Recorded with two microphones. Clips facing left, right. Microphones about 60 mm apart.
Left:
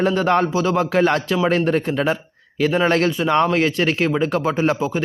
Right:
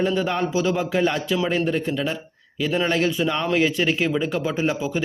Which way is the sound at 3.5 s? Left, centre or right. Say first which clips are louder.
Left 2 dB; left.